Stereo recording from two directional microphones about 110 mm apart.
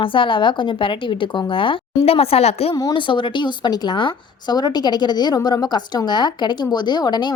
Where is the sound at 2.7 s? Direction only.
40° left (ahead or behind).